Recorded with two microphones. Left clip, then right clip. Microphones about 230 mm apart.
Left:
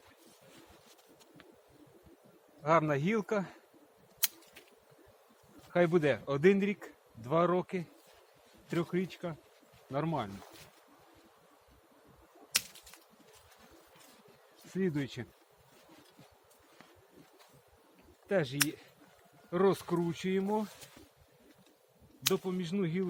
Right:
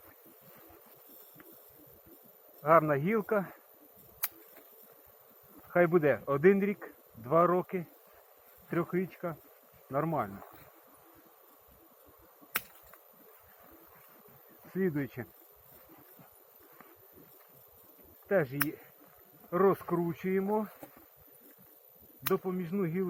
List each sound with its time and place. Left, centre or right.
2.6 s a man's voice: left
5.7 s a man's voice: left
14.7 s a man's voice: left
18.3 s a man's voice: left
22.3 s a man's voice: centre